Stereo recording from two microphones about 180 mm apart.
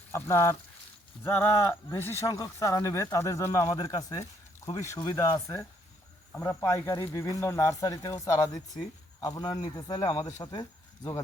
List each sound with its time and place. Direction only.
0.1 s speech: 15° left (ahead or behind)